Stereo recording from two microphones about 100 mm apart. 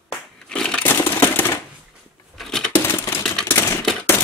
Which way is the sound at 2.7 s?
25° left (ahead or behind).